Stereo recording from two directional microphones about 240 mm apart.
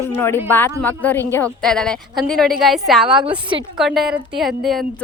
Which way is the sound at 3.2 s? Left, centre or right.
Right.